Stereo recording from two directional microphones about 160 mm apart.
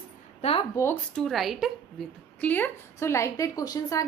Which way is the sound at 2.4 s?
10° left (ahead or behind).